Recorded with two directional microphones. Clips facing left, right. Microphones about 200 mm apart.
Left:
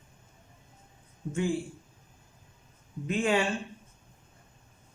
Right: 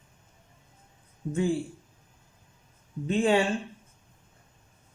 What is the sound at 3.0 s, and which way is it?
Speech, 30° right (ahead or behind).